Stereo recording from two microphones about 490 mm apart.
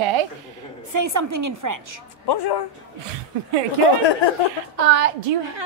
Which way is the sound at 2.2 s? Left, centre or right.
Left.